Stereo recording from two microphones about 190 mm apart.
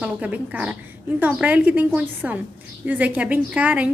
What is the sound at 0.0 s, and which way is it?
A woman's voice, 5° right (ahead or behind).